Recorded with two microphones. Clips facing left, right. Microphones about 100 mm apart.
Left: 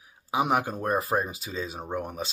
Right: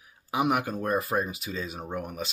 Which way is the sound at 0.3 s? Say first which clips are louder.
Left 1 dB; 30° left (ahead or behind).